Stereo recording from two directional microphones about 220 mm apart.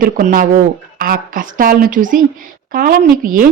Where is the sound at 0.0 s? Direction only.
40° right (ahead or behind).